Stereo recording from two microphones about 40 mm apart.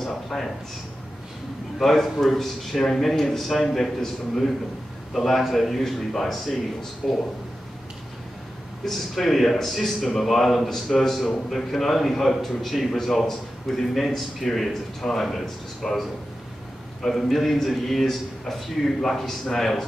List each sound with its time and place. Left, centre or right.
0.0 s a sound: centre
1.8 s a man's voice: centre
8.8 s a man's voice: centre